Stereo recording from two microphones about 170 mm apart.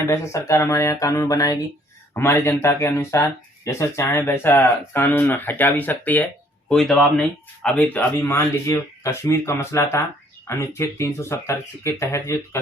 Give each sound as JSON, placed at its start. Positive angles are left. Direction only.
{"t": 0.1, "sound": "speech", "side_deg": 15}